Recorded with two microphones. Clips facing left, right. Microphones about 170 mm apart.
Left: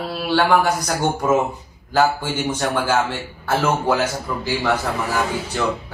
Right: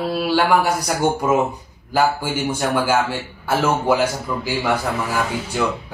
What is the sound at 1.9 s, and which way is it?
A woman's voice, 10° right (ahead or behind).